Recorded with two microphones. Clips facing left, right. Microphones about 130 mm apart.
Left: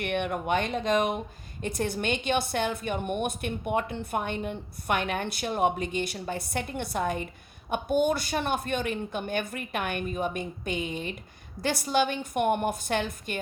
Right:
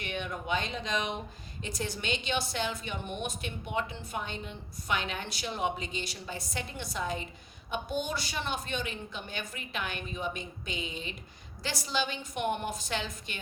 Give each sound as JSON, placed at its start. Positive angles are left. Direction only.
{"t": 0.0, "sound": "a woman's voice", "side_deg": 60}